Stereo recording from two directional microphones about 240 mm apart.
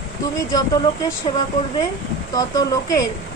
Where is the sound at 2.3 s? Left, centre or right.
Centre.